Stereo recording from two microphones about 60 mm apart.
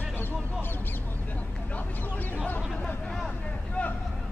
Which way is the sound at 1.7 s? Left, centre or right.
Left.